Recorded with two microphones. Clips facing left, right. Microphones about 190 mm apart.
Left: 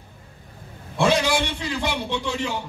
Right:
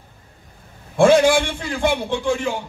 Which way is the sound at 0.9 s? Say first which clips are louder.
Right 7 dB; 50° right (ahead or behind).